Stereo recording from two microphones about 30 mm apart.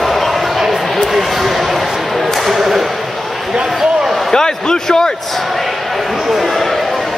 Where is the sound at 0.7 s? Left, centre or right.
Centre.